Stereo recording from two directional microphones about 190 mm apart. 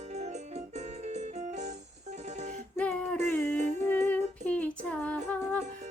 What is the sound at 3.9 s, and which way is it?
Humming, 10° left (ahead or behind).